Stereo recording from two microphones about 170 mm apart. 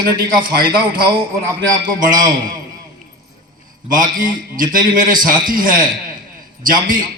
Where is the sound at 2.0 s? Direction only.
50° right (ahead or behind).